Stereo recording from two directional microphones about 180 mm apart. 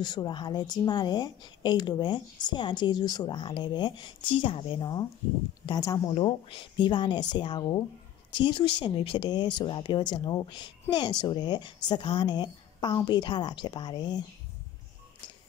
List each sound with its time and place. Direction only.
0.0 s speech: 25° left (ahead or behind)